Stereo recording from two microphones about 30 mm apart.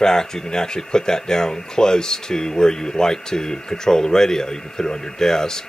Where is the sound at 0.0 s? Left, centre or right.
Centre.